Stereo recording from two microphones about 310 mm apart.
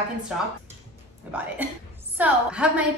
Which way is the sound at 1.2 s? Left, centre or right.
Centre.